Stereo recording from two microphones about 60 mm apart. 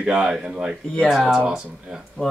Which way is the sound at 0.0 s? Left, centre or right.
Centre.